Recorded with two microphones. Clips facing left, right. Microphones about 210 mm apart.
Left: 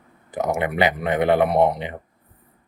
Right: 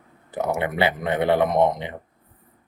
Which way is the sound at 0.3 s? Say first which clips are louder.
Left 1 dB; 15° left (ahead or behind).